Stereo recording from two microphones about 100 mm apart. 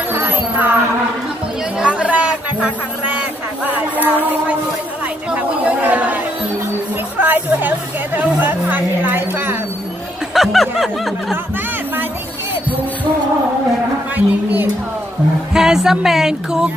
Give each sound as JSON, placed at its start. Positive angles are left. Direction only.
{"t": 0.1, "sound": "music", "side_deg": -20}
{"t": 1.8, "sound": "chatter", "side_deg": -10}
{"t": 3.2, "sound": "a sound", "side_deg": -15}
{"t": 5.3, "sound": "speech", "side_deg": -15}
{"t": 7.2, "sound": "speech", "side_deg": -20}
{"t": 10.3, "sound": "snicker", "side_deg": 0}
{"t": 14.1, "sound": "a sound", "side_deg": -20}
{"t": 15.5, "sound": "music", "side_deg": -5}